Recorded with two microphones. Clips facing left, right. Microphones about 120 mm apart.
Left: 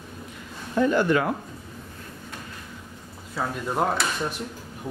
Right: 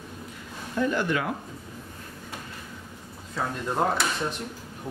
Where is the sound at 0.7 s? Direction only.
45° left (ahead or behind).